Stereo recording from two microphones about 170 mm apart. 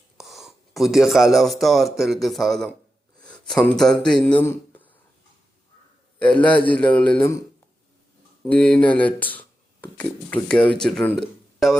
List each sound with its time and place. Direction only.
0.2 s speech: centre (ahead or behind)
3.2 s a sound: 5° left (ahead or behind)
4.0 s speech: 5° left (ahead or behind)
6.1 s speech: 10° left (ahead or behind)
8.4 s speech: 10° left (ahead or behind)